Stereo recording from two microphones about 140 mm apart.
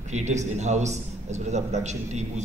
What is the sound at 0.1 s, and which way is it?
A man's voice, 55° right (ahead or behind).